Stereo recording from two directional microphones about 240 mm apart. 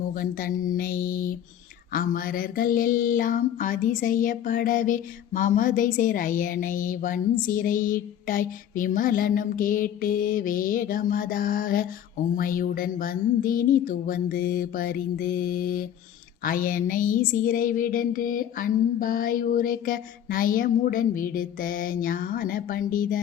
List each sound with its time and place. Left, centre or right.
0.1 s mantra: left